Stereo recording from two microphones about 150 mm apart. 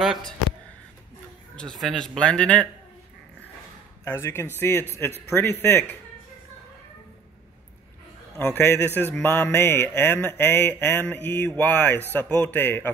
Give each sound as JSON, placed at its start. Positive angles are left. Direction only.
{"t": 0.0, "sound": "a sound", "side_deg": 0}
{"t": 1.6, "sound": "speech", "side_deg": 5}
{"t": 4.0, "sound": "mantra", "side_deg": 15}
{"t": 8.5, "sound": "mantra", "side_deg": 15}